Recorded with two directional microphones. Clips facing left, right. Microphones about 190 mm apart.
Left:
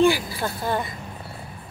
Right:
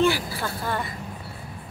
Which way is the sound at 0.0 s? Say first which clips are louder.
Left 3 dB; 15° left (ahead or behind).